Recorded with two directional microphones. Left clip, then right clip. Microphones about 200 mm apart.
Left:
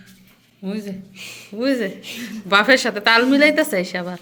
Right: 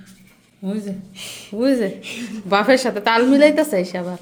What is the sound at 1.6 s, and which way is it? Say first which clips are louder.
A woman's voice: right 2 dB; 15° right (ahead or behind).